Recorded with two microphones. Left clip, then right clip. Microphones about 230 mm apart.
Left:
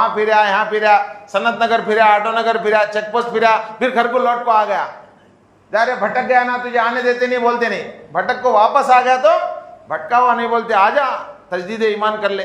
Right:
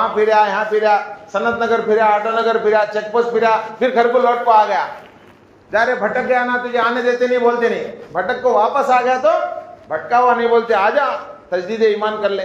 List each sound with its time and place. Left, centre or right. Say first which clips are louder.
0.0 s a man's voice: even; left